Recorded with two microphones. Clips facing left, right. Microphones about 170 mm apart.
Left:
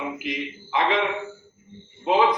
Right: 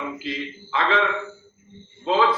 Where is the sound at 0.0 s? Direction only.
15° left (ahead or behind).